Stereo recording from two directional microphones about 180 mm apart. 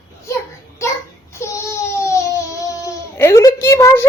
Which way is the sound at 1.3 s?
15° left (ahead or behind).